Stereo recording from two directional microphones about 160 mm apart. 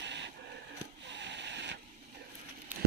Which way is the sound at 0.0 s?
90° right.